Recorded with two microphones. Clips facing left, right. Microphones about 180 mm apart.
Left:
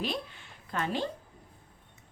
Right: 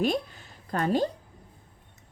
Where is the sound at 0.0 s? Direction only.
45° right (ahead or behind).